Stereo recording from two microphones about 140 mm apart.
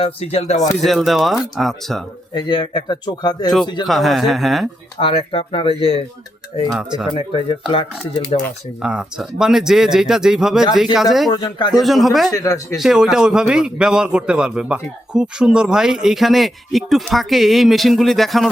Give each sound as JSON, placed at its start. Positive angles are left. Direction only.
{"t": 0.0, "sound": "speech", "side_deg": 45}
{"t": 0.9, "sound": "a man's voice", "side_deg": 0}
{"t": 2.3, "sound": "speech", "side_deg": 35}
{"t": 3.8, "sound": "a man's voice", "side_deg": 0}
{"t": 4.9, "sound": "speech", "side_deg": 40}
{"t": 7.1, "sound": "speech", "side_deg": 40}
{"t": 8.8, "sound": "a man's voice", "side_deg": -5}
{"t": 11.3, "sound": "speech", "side_deg": 30}
{"t": 11.8, "sound": "a man's voice", "side_deg": 0}
{"t": 12.3, "sound": "speech", "side_deg": 25}
{"t": 12.7, "sound": "a man's voice", "side_deg": -5}